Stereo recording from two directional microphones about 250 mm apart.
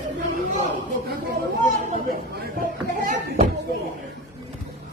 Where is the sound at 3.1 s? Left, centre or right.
Right.